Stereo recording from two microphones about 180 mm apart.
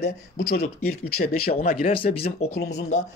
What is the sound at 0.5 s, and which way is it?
A man's voice, 55° left (ahead or behind).